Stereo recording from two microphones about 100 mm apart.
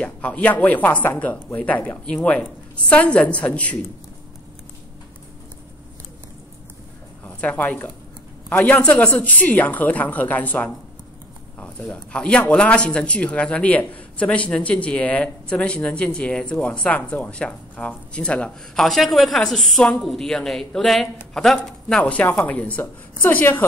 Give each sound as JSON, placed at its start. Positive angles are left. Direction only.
{"t": 0.0, "sound": "a man's voice", "side_deg": 15}
{"t": 7.2, "sound": "a man's voice", "side_deg": 15}